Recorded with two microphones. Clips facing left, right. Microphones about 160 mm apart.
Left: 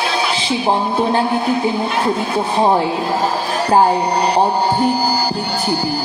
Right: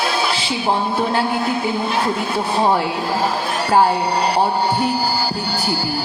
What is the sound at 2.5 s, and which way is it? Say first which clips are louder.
Speech: left 3 dB; 20° left (ahead or behind).